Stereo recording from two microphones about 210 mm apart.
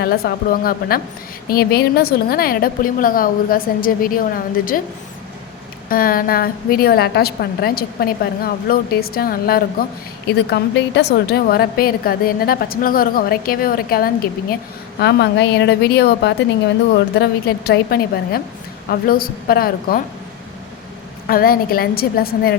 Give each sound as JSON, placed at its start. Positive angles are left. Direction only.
{"t": 0.0, "sound": "a woman's voice", "side_deg": 45}
{"t": 5.9, "sound": "a woman's voice", "side_deg": 45}
{"t": 15.0, "sound": "a woman's voice", "side_deg": 55}
{"t": 21.2, "sound": "a woman's voice", "side_deg": 45}